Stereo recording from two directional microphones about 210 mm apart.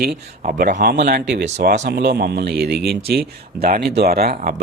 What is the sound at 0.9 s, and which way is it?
Speech, 50° right (ahead or behind).